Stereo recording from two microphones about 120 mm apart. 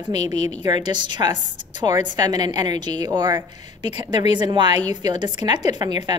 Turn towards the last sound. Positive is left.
turn(degrees=-35)  # may be behind; listen again after turning